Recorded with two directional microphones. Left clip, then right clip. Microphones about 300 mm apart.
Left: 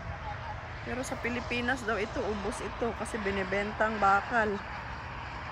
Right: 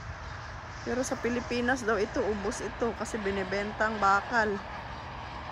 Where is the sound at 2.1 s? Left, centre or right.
Right.